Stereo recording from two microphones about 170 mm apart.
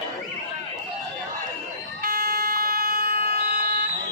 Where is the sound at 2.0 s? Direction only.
60° right (ahead or behind).